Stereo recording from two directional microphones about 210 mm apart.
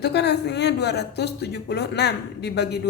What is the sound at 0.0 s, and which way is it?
Speech, 50° left (ahead or behind).